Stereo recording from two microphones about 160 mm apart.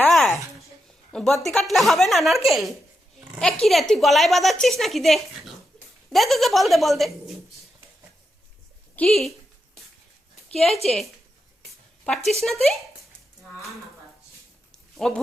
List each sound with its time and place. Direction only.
0.0 s a sound: centre (ahead or behind)
1.1 s speech: centre (ahead or behind)
9.0 s speech: centre (ahead or behind)
10.5 s speech: centre (ahead or behind)
14.9 s speech: centre (ahead or behind)